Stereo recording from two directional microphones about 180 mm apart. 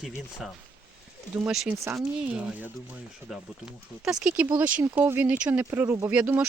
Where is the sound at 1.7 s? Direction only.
15° right (ahead or behind).